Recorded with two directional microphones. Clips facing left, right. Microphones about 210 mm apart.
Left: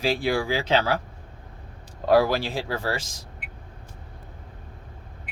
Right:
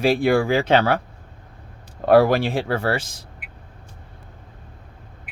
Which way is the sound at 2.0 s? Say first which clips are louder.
Right 5 dB; 55° right (ahead or behind).